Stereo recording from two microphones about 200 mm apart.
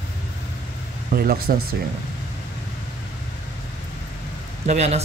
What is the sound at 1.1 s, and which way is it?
Speech, 50° right (ahead or behind).